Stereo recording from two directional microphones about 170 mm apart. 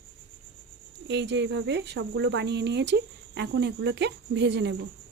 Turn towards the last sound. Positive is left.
turn(degrees=-90)